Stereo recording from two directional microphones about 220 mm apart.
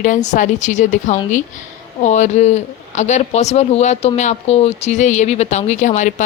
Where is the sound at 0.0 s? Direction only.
35° left (ahead or behind).